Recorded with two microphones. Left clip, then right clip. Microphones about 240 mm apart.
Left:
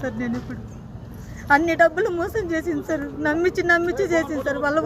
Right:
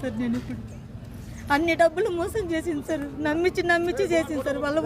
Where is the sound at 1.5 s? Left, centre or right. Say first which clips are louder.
Left 4 dB; centre.